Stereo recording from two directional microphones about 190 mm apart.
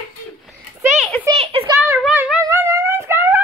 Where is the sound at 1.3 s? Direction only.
30° right (ahead or behind).